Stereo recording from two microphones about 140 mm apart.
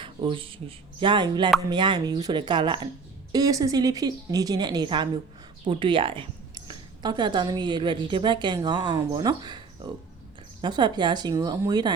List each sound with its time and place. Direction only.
0.0 s a woman's voice: 35° right (ahead or behind)